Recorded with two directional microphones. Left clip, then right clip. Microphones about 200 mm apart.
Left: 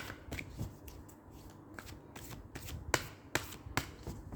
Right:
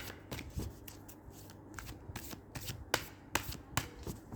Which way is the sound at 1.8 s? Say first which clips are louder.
Right 2 dB; 25° right (ahead or behind).